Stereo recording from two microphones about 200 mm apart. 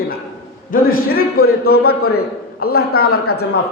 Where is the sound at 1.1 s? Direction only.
50° left (ahead or behind).